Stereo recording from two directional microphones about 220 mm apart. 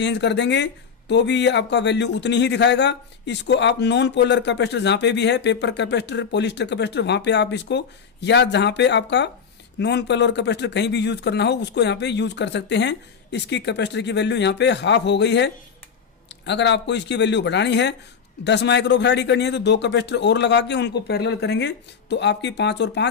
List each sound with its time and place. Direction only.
0.0 s speech: 50° left (ahead or behind)